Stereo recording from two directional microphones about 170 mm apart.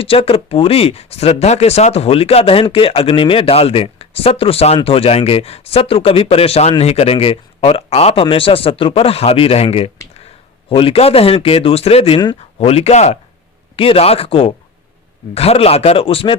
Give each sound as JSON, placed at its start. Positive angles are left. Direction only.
{"t": 0.0, "sound": "speech", "side_deg": 35}